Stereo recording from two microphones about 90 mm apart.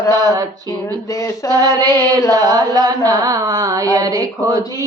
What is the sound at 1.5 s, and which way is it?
Female singing, 45° right (ahead or behind).